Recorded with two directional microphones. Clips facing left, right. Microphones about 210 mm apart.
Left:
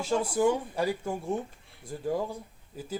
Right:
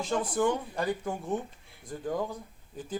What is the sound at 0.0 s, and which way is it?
Speech, 10° left (ahead or behind).